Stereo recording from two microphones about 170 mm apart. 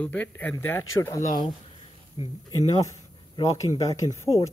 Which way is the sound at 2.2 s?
25° left (ahead or behind).